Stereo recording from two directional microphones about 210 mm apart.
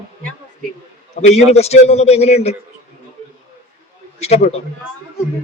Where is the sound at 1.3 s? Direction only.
30° left (ahead or behind).